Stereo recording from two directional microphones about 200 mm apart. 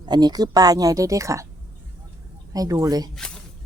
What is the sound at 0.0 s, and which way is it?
Speech, 20° right (ahead or behind).